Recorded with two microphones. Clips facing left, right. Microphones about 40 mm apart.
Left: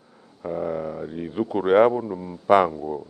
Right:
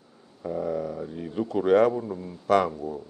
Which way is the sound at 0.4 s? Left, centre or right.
Left.